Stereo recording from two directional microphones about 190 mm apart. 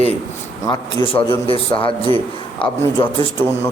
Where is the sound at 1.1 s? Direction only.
30° left (ahead or behind).